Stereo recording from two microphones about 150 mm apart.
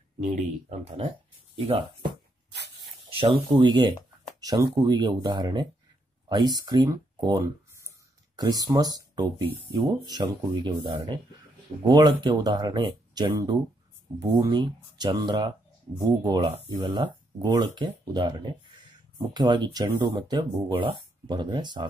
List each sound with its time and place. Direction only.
0.2 s speech: 45° right (ahead or behind)
3.1 s speech: 35° right (ahead or behind)